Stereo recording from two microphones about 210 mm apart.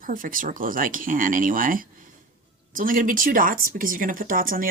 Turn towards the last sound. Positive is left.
turn(degrees=-40)  # may be behind; listen again after turning